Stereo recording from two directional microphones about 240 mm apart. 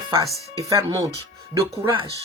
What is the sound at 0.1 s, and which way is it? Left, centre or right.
Speech, centre.